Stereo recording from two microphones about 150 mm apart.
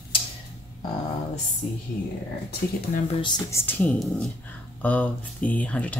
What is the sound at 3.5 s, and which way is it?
Speech, 15° left (ahead or behind).